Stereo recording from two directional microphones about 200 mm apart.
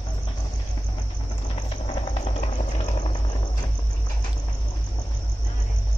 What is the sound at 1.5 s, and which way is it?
Cricket, 25° left (ahead or behind).